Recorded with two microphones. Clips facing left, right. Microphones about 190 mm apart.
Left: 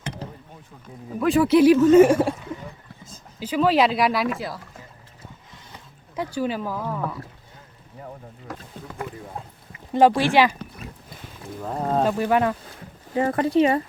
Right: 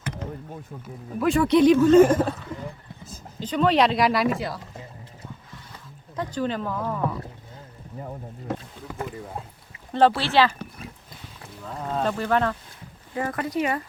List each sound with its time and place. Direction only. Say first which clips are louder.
1.2 s speech: left 2 dB; centre (ahead or behind)
3.4 s speech: left 1 dB; 5° left (ahead or behind)
6.1 s speech: left 1 dB; 10° left (ahead or behind)
8.5 s speech: right 7 dB; 25° right (ahead or behind)
9.9 s speech: left 3 dB; 15° left (ahead or behind)
11.7 s speech: left 5 dB; 40° left (ahead or behind)
12.0 s speech: even; 10° left (ahead or behind)
13.1 s speech: left 7 dB; 30° left (ahead or behind)